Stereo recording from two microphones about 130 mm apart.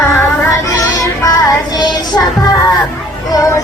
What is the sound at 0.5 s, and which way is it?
Music, 25° left (ahead or behind).